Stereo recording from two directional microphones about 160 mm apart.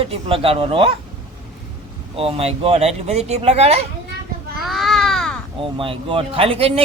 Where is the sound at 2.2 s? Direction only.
35° right (ahead or behind).